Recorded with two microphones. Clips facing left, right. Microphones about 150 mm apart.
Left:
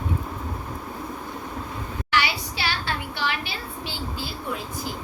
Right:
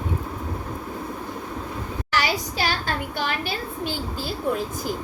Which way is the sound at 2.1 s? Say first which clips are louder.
Right 1 dB; 40° right (ahead or behind).